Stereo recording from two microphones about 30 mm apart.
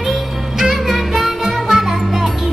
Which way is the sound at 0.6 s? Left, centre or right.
Centre.